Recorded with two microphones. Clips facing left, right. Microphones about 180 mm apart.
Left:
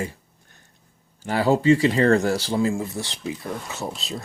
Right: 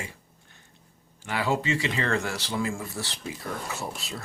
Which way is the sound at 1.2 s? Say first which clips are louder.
Left 9 dB; 40° left (ahead or behind).